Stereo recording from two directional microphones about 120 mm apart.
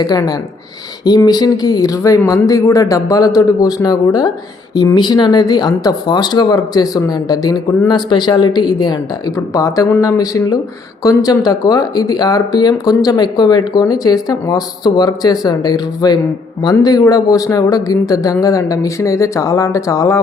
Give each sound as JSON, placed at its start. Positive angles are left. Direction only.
{"t": 0.0, "sound": "speech", "side_deg": 35}